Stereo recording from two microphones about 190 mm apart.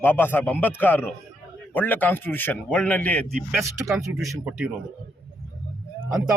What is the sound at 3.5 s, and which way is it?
Speech, 15° right (ahead or behind).